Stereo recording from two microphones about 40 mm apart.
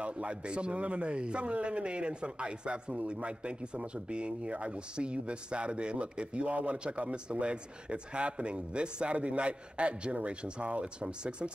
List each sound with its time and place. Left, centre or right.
0.0 s a man's voice: right